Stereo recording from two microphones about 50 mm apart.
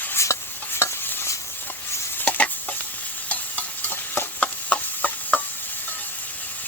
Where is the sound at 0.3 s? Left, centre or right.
Left.